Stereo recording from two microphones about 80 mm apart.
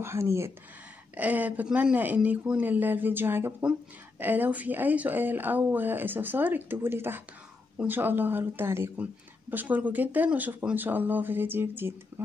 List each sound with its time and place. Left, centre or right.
0.0 s speech: right
1.1 s speech: right